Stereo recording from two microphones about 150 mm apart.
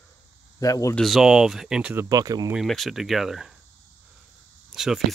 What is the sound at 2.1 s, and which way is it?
Speech, 25° right (ahead or behind).